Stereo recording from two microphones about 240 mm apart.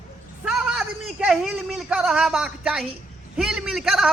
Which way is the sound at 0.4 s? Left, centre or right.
Centre.